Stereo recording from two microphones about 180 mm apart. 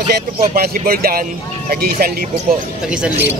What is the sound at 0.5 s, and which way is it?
Speech, 55° right (ahead or behind).